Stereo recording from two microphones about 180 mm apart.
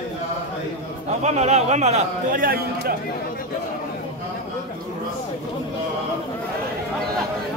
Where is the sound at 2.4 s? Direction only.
55° right (ahead or behind).